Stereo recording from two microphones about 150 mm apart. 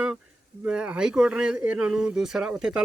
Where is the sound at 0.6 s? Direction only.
5° right (ahead or behind).